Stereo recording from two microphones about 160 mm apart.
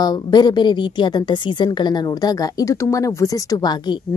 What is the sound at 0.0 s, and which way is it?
A woman's voice, 25° left (ahead or behind).